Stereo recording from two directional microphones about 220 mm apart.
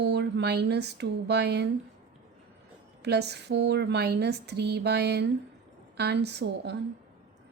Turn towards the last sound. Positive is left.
turn(degrees=-50)  # may be behind; listen again after turning